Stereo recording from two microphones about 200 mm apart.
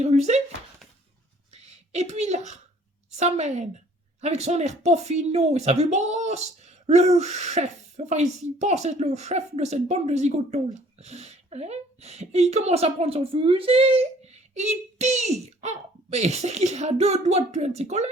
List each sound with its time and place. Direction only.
0.0 s speech: 35° right (ahead or behind)
1.5 s a woman's voice: 35° right (ahead or behind)